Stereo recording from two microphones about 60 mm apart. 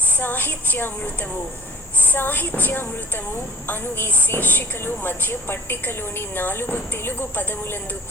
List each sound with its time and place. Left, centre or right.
0.2 s a woman's voice: left
2.0 s a woman's voice: left